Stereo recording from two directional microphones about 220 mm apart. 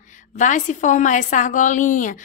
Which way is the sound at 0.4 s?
35° left (ahead or behind).